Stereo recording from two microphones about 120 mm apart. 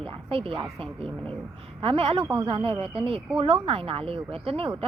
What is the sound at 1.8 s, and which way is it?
Speech, 50° right (ahead or behind).